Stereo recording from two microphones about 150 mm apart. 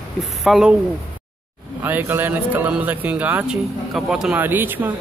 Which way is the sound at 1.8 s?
15° right (ahead or behind).